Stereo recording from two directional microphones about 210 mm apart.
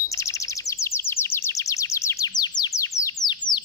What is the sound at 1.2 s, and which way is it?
Chirp, 10° left (ahead or behind).